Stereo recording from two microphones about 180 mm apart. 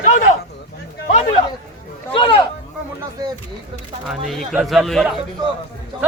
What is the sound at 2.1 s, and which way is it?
Speech, 30° left (ahead or behind).